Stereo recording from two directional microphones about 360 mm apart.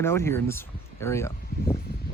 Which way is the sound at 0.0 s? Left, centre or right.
Centre.